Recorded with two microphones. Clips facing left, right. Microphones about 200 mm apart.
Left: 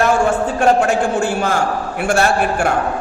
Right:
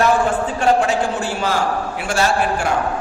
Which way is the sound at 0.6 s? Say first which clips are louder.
Left 2 dB; 50° left (ahead or behind).